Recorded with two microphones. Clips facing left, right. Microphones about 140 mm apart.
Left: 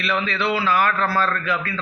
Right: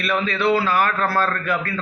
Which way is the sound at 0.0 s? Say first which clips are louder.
Right 2 dB; 45° right (ahead or behind).